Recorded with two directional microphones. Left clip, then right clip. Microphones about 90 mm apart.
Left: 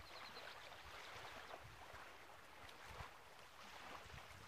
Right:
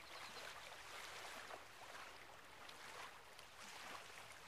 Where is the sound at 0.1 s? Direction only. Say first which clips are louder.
Right 2 dB; 50° right (ahead or behind).